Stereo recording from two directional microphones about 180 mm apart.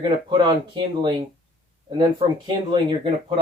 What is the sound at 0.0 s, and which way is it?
Speech, 25° right (ahead or behind).